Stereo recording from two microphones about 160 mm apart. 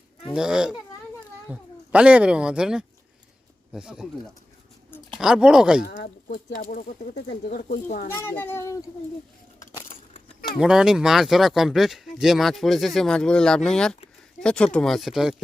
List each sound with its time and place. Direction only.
0.3 s speech: 5° right (ahead or behind)
5.2 s speech: 5° right (ahead or behind)
6.2 s speech: 60° left (ahead or behind)
8.1 s a child's voice: 15° left (ahead or behind)
10.6 s speech: 5° right (ahead or behind)